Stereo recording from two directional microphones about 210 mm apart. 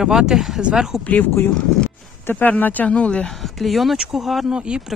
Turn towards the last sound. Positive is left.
turn(degrees=-5)  # may be behind; listen again after turning